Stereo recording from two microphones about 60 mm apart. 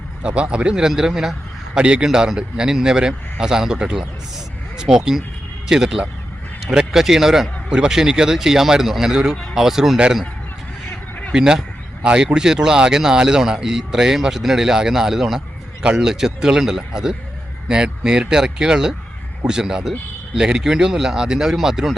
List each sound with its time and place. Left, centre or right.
0.2 s speech: centre
11.3 s speech: centre